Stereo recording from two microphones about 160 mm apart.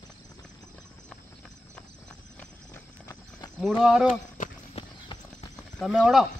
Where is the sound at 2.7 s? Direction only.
15° left (ahead or behind).